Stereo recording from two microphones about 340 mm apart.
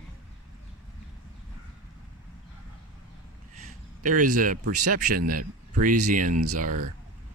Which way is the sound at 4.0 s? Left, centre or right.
Right.